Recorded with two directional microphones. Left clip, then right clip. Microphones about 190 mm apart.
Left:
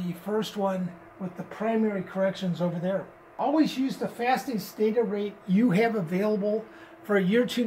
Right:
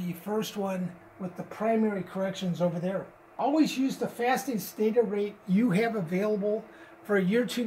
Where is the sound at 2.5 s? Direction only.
15° right (ahead or behind).